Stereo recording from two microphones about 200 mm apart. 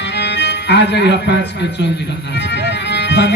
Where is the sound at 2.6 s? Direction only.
60° left (ahead or behind).